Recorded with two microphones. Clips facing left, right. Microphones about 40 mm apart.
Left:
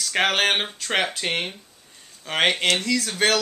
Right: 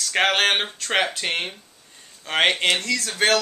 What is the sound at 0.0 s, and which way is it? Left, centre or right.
Speech, centre.